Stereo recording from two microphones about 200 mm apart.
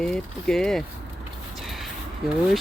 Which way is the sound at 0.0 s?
5° left (ahead or behind).